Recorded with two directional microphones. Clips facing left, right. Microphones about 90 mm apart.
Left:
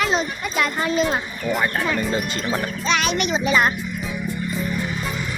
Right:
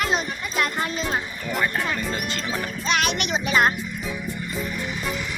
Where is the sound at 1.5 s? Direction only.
Centre (ahead or behind).